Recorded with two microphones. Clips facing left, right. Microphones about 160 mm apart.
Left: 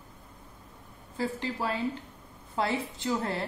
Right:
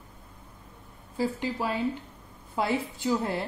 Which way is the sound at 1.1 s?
10° right (ahead or behind).